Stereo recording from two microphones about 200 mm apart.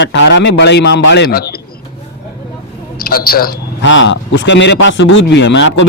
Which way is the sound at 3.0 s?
50° left (ahead or behind).